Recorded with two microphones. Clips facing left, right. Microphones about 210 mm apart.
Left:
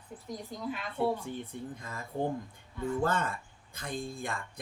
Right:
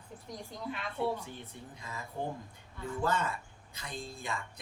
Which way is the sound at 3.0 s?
50° left (ahead or behind).